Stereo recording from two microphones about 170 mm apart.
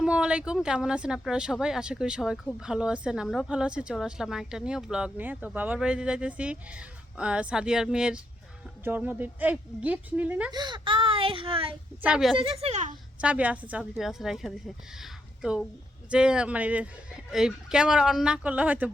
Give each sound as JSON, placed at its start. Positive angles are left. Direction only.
{"t": 0.0, "sound": "a woman's voice", "side_deg": -5}
{"t": 10.5, "sound": "a child's voice", "side_deg": -25}
{"t": 12.0, "sound": "speech", "side_deg": -5}
{"t": 12.4, "sound": "speech", "side_deg": -35}
{"t": 13.2, "sound": "speech", "side_deg": -10}
{"t": 15.0, "sound": "a sound", "side_deg": -5}
{"t": 16.0, "sound": "a woman's voice", "side_deg": -5}